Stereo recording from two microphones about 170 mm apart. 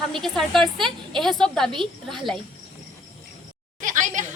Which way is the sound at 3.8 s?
50° right (ahead or behind).